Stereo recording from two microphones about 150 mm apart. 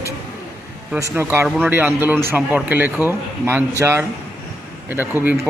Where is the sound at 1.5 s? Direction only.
5° right (ahead or behind).